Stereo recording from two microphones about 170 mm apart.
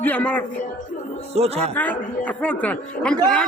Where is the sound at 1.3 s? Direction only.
35° right (ahead or behind).